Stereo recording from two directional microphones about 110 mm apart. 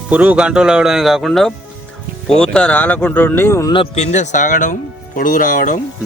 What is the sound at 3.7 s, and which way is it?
Speech, 55° left (ahead or behind).